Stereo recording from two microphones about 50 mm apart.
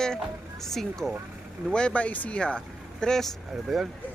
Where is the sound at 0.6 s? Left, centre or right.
Centre.